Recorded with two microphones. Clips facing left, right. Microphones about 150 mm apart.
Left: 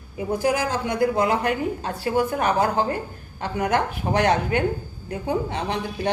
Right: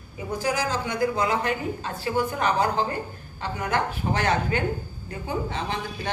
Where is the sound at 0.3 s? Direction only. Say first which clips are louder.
Left 4 dB; 55° left (ahead or behind).